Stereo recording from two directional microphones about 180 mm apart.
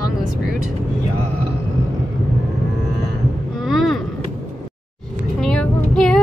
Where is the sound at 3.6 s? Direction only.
Centre (ahead or behind).